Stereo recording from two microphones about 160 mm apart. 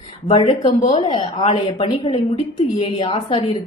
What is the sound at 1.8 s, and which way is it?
A woman's voice, 30° left (ahead or behind).